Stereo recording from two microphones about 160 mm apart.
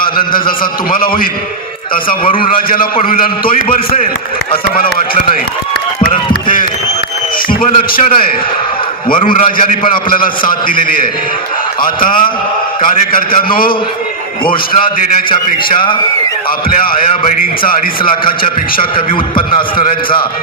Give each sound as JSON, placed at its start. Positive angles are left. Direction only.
{"t": 0.3, "sound": "a man's voice", "side_deg": 60}
{"t": 2.2, "sound": "a man's voice", "side_deg": 35}
{"t": 2.5, "sound": "a man's voice", "side_deg": 60}
{"t": 4.7, "sound": "a man's voice", "side_deg": 60}
{"t": 6.1, "sound": "a sound", "side_deg": 60}
{"t": 7.9, "sound": "a man's voice", "side_deg": 65}
{"t": 15.3, "sound": "a man's voice", "side_deg": 30}
{"t": 16.6, "sound": "a man's voice", "side_deg": 65}
{"t": 18.4, "sound": "a man's voice", "side_deg": 30}